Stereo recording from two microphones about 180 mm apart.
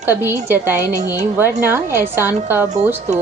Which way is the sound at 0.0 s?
10° right (ahead or behind).